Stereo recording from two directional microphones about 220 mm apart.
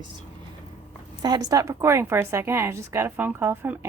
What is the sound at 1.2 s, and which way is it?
A woman's voice, 15° right (ahead or behind).